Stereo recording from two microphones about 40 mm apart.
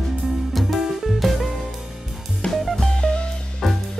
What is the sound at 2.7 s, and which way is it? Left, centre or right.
Music, centre.